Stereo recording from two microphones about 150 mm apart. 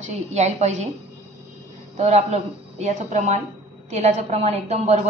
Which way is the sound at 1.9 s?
50° right (ahead or behind).